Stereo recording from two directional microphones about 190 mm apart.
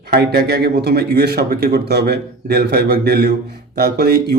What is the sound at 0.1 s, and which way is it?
A man's voice, 55° right (ahead or behind).